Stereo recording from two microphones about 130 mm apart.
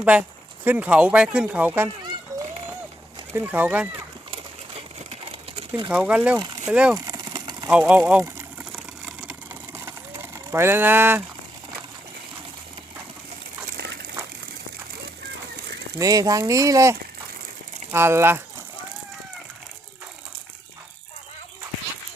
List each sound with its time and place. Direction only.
0.0 s speech: 10° right (ahead or behind)
3.3 s speech: 15° right (ahead or behind)
4.3 s a sound: 50° right (ahead or behind)
5.9 s speech: 10° right (ahead or behind)
7.0 s a sound: 30° right (ahead or behind)
7.7 s speech: 10° right (ahead or behind)
8.7 s vehicle: 5° right (ahead or behind)
9.5 s a sound: 20° right (ahead or behind)
16.0 s speech: 25° right (ahead or behind)